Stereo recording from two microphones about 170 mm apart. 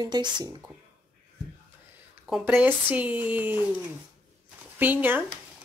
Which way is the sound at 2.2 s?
5° right (ahead or behind).